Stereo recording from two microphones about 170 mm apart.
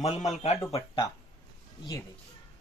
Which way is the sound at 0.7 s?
25° left (ahead or behind).